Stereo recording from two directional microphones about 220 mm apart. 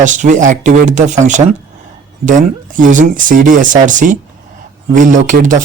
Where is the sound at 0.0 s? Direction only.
35° right (ahead or behind).